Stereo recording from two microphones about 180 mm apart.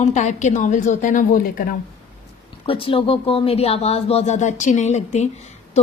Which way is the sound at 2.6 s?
30° left (ahead or behind).